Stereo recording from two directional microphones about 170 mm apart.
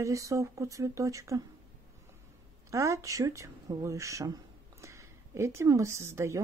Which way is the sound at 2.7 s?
20° right (ahead or behind).